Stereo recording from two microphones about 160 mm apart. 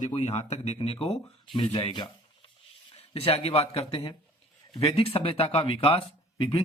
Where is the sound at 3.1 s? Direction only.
40° left (ahead or behind).